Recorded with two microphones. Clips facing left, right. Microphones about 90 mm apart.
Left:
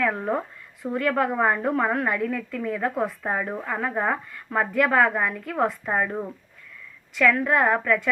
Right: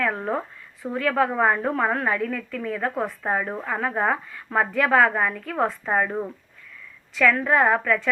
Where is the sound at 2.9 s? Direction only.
20° right (ahead or behind).